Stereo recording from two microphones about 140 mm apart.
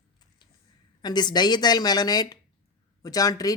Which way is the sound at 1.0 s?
30° left (ahead or behind).